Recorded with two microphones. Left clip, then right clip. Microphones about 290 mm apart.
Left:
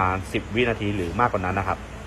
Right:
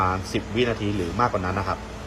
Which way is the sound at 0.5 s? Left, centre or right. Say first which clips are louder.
Left 1 dB; centre.